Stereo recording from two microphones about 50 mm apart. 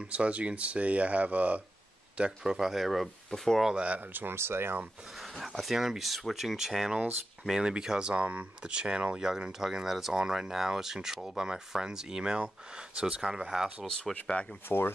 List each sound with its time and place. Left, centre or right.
0.0 s speech: right
2.5 s speech: centre
3.7 s speech: right
4.0 s speech: right
5.2 s speech: centre
14.1 s speech: centre
14.7 s speech: left